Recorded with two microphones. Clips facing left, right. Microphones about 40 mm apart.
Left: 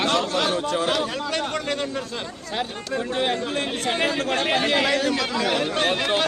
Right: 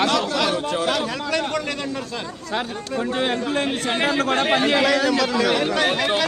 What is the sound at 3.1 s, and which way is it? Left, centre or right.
Speech, right.